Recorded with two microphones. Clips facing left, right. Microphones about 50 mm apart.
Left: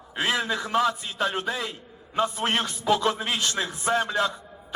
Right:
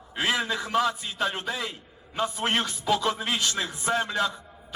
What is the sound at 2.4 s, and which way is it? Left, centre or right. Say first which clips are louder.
A man's voice: left 1 dB; left.